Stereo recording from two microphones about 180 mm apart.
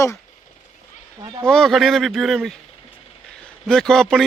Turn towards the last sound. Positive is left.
turn(degrees=0)  # may be behind; listen again after turning